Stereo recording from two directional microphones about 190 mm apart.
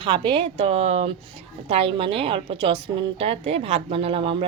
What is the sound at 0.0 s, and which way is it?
A woman's voice, 25° right (ahead or behind).